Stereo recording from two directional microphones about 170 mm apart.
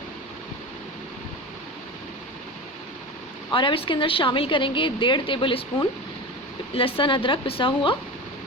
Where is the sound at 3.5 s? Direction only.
30° left (ahead or behind).